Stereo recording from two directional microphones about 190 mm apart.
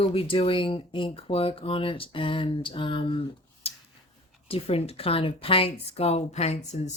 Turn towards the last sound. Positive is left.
turn(degrees=35)  # may be behind; listen again after turning